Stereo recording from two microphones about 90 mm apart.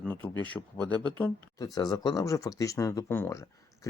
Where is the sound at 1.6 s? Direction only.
45° left (ahead or behind).